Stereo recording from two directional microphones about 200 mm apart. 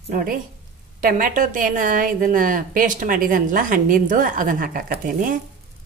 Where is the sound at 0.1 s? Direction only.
45° right (ahead or behind).